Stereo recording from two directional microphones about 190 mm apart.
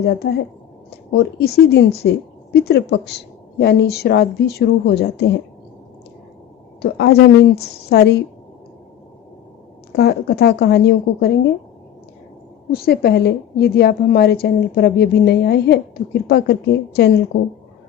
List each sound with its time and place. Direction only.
0.9 s a woman's voice: 60° left (ahead or behind)
6.9 s a woman's voice: 60° left (ahead or behind)
9.9 s a woman's voice: 60° left (ahead or behind)
12.7 s a woman's voice: 55° left (ahead or behind)